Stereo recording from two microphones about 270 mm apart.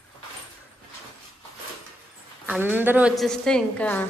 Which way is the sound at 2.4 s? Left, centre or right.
Centre.